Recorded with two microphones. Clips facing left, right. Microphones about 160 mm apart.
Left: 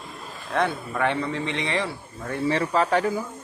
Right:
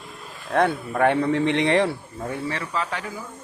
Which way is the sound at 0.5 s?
50° right (ahead or behind).